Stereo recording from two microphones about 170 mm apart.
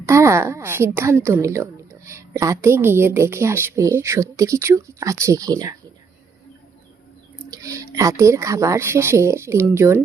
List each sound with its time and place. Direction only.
0.0 s a woman's voice: 15° right (ahead or behind)
7.5 s a woman's voice: 20° right (ahead or behind)